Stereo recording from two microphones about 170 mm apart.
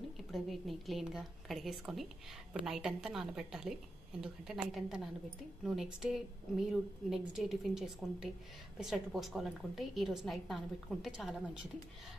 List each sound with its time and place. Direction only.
0.3 s a woman's voice: centre (ahead or behind)